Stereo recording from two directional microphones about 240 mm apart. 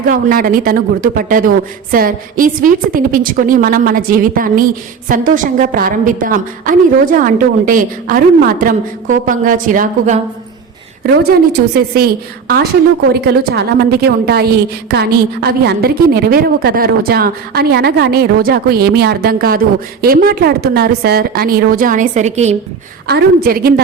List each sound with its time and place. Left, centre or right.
0.1 s a woman's voice: right
13.2 s a woman's voice: right
23.0 s a woman's voice: right